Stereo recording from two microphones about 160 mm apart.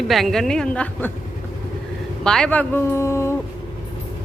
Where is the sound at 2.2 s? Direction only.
5° left (ahead or behind).